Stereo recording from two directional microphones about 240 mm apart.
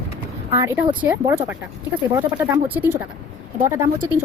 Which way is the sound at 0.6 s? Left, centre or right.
Centre.